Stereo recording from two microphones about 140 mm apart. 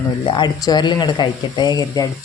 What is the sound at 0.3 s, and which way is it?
A woman's voice, 30° left (ahead or behind).